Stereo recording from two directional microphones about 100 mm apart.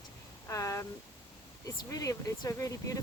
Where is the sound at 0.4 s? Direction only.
30° left (ahead or behind).